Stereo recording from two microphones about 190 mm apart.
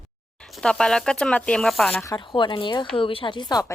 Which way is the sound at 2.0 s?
25° left (ahead or behind).